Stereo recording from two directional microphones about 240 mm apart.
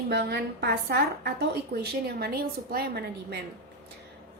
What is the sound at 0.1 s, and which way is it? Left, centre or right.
A woman's voice, right.